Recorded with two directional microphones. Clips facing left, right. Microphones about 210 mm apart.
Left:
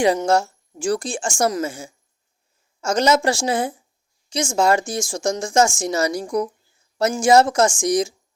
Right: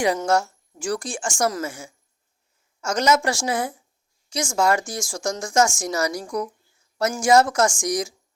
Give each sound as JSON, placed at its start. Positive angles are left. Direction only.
{"t": 0.3, "sound": "speech", "side_deg": 30}